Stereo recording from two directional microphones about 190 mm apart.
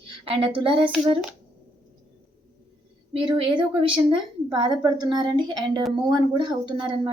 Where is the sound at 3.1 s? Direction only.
25° right (ahead or behind).